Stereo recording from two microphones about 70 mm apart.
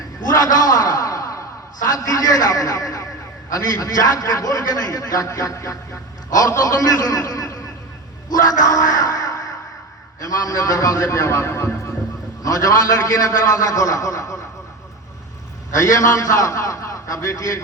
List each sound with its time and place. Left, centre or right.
0.8 s a sound: left
1.9 s a man's voice: left
8.4 s music: left
10.2 s a man's voice: left
12.4 s a man's voice: left
15.8 s a man's voice: left